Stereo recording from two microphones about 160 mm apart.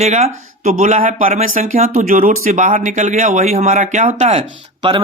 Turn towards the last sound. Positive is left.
turn(degrees=-40)  # may be behind; listen again after turning